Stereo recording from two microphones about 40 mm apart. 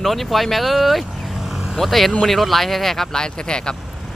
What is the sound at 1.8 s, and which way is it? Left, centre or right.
Speech, centre.